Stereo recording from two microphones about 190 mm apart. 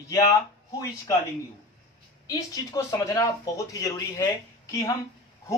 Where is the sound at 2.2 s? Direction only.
20° left (ahead or behind).